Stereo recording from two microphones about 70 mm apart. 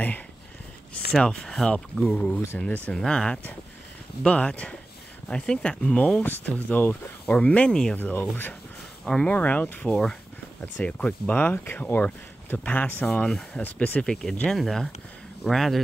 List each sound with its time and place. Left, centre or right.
1.1 s speech: centre
2.1 s speech: centre
7.9 s speech: left
9.0 s speech: centre
9.4 s speech: left
13.6 s speech: left
14.0 s speech: centre